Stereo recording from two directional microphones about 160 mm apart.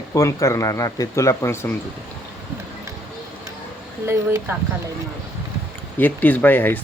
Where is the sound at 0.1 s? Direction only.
20° left (ahead or behind).